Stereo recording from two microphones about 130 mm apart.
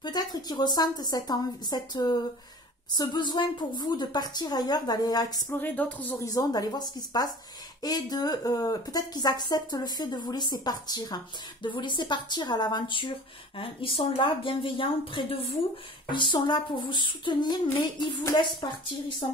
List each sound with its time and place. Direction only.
0.0 s speech: 30° left (ahead or behind)
5.5 s speech: 15° left (ahead or behind)
6.2 s speech: 30° left (ahead or behind)